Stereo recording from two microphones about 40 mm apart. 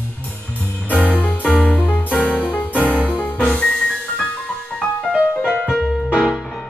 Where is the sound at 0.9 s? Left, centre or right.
Left.